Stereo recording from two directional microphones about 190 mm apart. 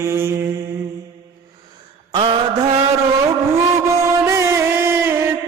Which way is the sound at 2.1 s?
25° right (ahead or behind).